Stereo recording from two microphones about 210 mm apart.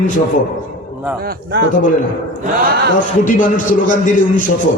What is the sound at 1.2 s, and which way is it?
Speech, 50° right (ahead or behind).